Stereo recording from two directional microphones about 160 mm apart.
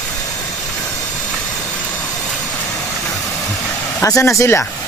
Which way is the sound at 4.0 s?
20° left (ahead or behind).